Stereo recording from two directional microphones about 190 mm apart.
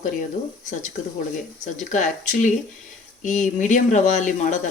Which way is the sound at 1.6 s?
40° left (ahead or behind).